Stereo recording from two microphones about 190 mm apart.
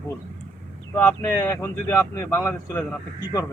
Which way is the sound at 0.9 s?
15° left (ahead or behind).